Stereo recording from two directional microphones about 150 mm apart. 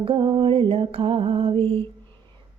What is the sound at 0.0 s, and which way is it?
Music, 30° right (ahead or behind).